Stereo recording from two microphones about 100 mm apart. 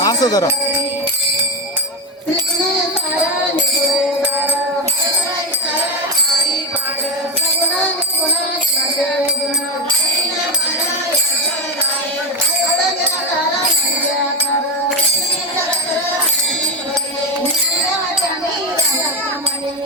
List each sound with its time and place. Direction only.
0.0 s music: 35° left (ahead or behind)